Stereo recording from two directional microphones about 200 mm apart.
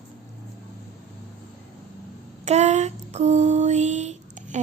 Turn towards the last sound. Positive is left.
turn(degrees=-40)  # may be behind; listen again after turning